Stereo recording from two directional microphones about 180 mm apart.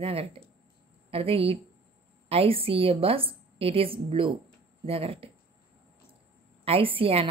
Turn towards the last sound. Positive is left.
turn(degrees=-30)  # may be behind; listen again after turning